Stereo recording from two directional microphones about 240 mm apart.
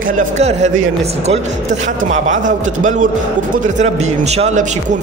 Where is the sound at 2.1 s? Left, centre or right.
Right.